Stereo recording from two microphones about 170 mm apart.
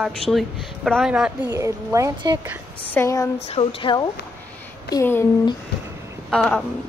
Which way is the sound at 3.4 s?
35° left (ahead or behind).